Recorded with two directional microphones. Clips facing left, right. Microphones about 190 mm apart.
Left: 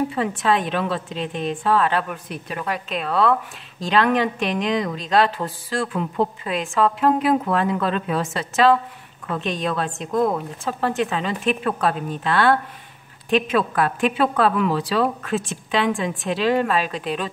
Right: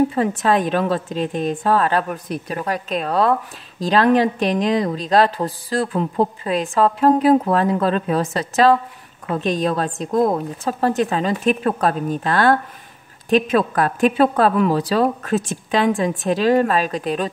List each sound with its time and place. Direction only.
0.1 s a woman's voice: 40° right (ahead or behind)